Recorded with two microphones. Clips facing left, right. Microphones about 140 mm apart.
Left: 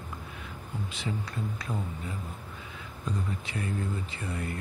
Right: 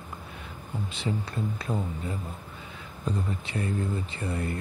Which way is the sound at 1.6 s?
30° right (ahead or behind).